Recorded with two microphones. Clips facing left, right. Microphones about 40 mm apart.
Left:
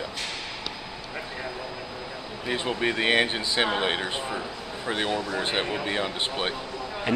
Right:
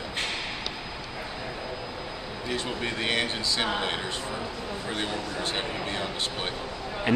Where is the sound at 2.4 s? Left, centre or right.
Left.